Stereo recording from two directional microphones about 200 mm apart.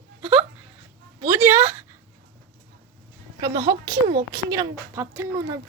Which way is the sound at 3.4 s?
20° right (ahead or behind).